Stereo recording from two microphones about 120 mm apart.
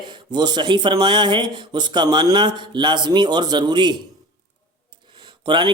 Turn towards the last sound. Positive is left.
turn(degrees=-40)  # may be behind; listen again after turning